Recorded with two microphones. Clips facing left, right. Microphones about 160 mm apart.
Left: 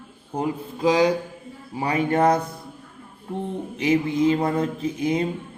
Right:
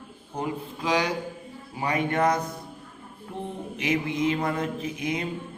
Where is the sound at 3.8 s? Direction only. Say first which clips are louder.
Left 6 dB; 30° left (ahead or behind).